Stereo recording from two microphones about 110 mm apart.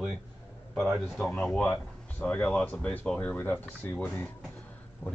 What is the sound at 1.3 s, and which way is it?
Speech, 10° left (ahead or behind).